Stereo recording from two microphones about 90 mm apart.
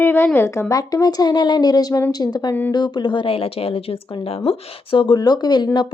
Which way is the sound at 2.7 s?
50° left (ahead or behind).